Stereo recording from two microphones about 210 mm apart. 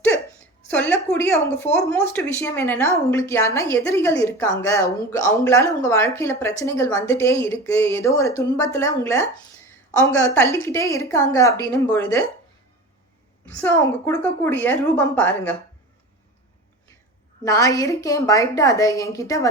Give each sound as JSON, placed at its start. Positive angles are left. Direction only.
{"t": 0.7, "sound": "a woman's voice", "side_deg": 10}
{"t": 13.4, "sound": "a woman's voice", "side_deg": 10}
{"t": 17.4, "sound": "a woman's voice", "side_deg": 15}